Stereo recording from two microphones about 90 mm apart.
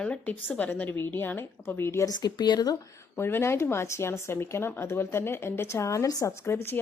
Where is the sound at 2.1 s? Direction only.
50° left (ahead or behind).